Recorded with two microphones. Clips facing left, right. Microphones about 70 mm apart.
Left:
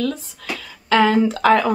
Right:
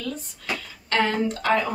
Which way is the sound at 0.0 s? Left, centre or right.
Left.